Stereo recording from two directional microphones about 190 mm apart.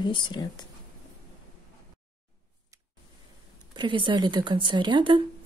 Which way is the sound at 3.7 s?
25° right (ahead or behind).